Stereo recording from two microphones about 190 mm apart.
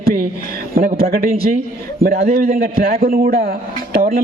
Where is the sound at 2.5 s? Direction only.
50° right (ahead or behind).